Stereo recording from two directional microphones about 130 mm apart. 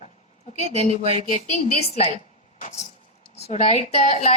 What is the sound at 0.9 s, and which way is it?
Speech, 45° right (ahead or behind).